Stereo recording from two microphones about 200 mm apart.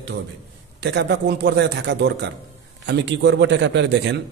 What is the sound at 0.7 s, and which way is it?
A man's voice, 60° right (ahead or behind).